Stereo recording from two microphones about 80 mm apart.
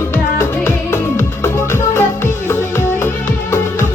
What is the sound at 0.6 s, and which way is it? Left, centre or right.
Music, left.